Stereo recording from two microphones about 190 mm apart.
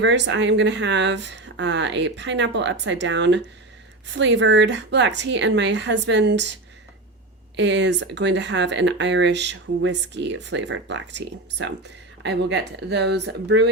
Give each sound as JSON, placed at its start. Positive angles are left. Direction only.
{"t": 0.0, "sound": "speech", "side_deg": -70}
{"t": 7.5, "sound": "speech", "side_deg": -70}